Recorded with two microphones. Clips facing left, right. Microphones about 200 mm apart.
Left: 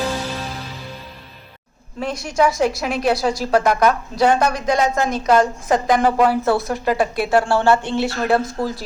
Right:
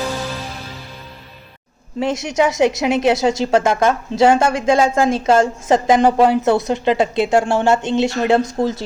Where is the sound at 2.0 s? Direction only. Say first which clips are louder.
Right 2 dB; 25° right (ahead or behind).